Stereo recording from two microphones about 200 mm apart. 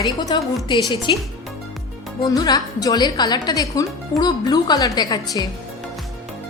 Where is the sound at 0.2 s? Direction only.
20° left (ahead or behind).